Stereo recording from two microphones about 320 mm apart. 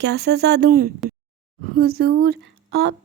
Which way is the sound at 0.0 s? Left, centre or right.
Right.